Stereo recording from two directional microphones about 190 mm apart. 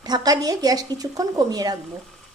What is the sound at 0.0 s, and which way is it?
A woman's voice, 20° right (ahead or behind).